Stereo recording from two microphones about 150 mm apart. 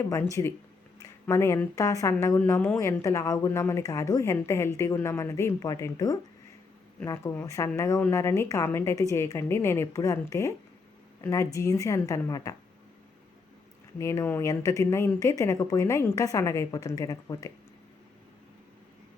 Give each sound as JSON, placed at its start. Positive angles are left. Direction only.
{"t": 0.1, "sound": "a woman's voice", "side_deg": 20}
{"t": 14.0, "sound": "a woman's voice", "side_deg": 20}